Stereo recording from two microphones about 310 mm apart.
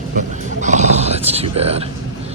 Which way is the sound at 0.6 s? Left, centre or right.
Right.